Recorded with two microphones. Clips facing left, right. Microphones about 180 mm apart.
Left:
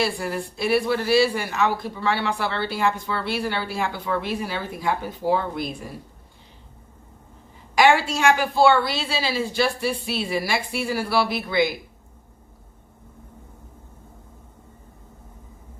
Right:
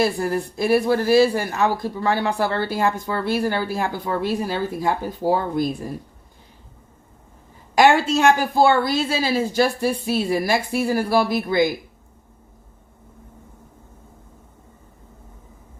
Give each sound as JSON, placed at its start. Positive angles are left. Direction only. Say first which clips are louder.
{"t": 0.0, "sound": "speech", "louder": "right 4 dB", "side_deg": -45}
{"t": 7.8, "sound": "speech", "louder": "right 3 dB", "side_deg": -45}